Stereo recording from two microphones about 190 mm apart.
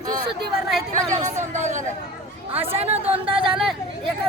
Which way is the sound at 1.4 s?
40° right (ahead or behind).